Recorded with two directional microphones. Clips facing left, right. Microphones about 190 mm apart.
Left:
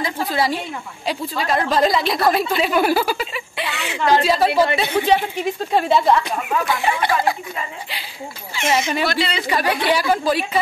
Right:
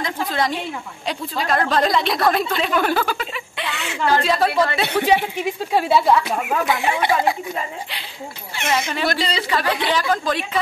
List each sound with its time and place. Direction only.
0.0 s a sound: 5° left (ahead or behind)
1.0 s a woman's voice: centre (ahead or behind)
4.5 s speech: 20° left (ahead or behind)
4.9 s a woman's voice: 10° right (ahead or behind)
8.6 s a woman's voice: 10° left (ahead or behind)
9.0 s speech: 45° right (ahead or behind)
9.5 s a woman's voice: 15° left (ahead or behind)